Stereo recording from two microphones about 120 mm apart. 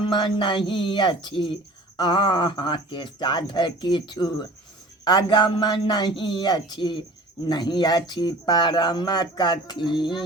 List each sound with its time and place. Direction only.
0.1 s speech: 40° left (ahead or behind)